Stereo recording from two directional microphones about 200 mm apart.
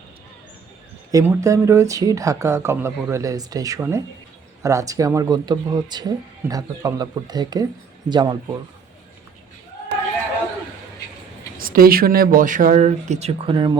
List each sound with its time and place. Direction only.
1.1 s speech: 15° right (ahead or behind)
11.5 s speech: 45° right (ahead or behind); by 13.7 s 25° right (ahead or behind)